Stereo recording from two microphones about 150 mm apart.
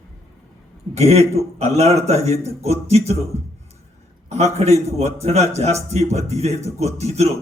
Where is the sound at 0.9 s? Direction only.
45° right (ahead or behind).